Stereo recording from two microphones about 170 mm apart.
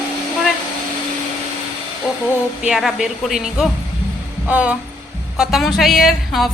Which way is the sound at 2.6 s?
Centre (ahead or behind).